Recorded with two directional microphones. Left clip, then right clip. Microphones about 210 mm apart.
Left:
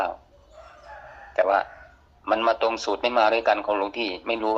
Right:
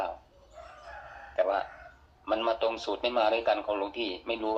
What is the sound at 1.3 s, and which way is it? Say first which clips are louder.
A man's voice: left 7 dB; 50° left (ahead or behind).